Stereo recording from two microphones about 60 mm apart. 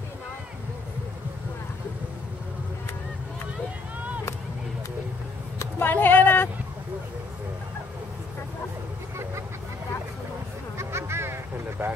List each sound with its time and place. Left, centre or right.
5.8 s a sound: left
10.8 s music: right
11.8 s vehicle: right